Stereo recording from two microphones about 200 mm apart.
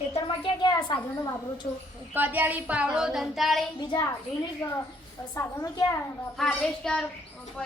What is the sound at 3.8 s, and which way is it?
Speech, 20° left (ahead or behind).